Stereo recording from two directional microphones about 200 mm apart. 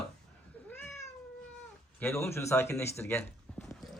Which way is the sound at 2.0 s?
10° left (ahead or behind).